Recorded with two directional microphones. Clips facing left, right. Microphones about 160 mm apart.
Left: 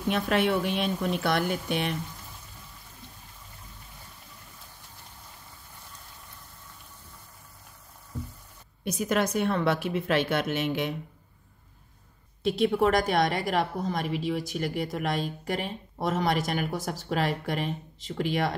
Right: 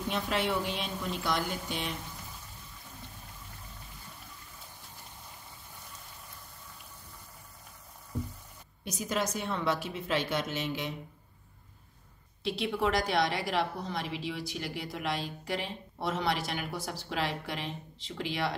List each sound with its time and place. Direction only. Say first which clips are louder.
0.1 s a woman's voice: left 6 dB; 60° left (ahead or behind)
8.8 s a woman's voice: left 6 dB; 60° left (ahead or behind)
12.4 s a woman's voice: left 7 dB; 45° left (ahead or behind)